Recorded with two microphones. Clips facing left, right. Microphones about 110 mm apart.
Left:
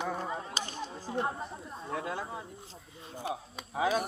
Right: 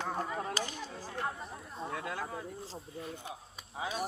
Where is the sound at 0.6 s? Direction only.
20° left (ahead or behind).